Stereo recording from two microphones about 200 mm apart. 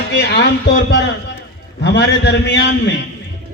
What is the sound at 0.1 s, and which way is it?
A man's voice, 60° left (ahead or behind).